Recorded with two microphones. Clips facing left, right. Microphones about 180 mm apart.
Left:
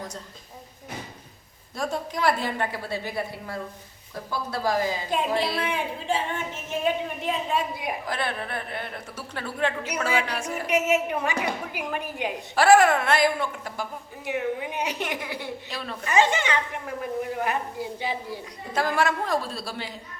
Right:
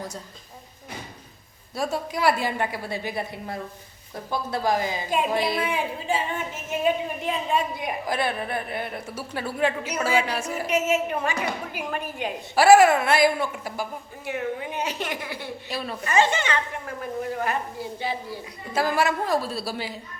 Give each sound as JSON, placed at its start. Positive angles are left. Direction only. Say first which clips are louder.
{"t": 1.7, "sound": "a woman's voice", "louder": "right 2 dB", "side_deg": -5}
{"t": 8.0, "sound": "a woman's voice", "louder": "right 3 dB", "side_deg": -10}
{"t": 10.7, "sound": "a woman's voice", "louder": "left 1 dB", "side_deg": 15}
{"t": 12.5, "sound": "a woman's voice", "louder": "right 2 dB", "side_deg": -10}
{"t": 14.3, "sound": "a woman's voice", "louder": "left 1 dB", "side_deg": 15}
{"t": 15.7, "sound": "a woman's voice", "louder": "right 3 dB", "side_deg": -10}
{"t": 16.0, "sound": "a woman's voice", "louder": "even", "side_deg": 15}
{"t": 18.7, "sound": "a woman's voice", "louder": "right 1 dB", "side_deg": -5}